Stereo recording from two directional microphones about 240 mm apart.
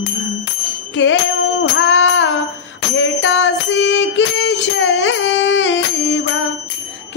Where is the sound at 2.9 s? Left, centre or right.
Left.